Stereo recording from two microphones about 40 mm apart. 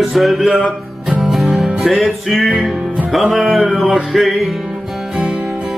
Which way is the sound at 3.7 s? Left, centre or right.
Centre.